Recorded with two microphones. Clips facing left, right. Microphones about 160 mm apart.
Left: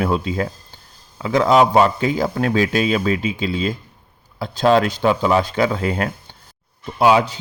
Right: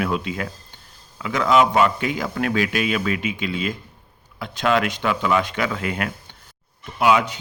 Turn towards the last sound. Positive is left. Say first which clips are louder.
# left 3 dB
turn(degrees=30)  # may be behind; listen again after turning